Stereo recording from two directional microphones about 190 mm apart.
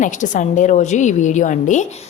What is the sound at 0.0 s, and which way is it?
A woman's voice, 40° left (ahead or behind).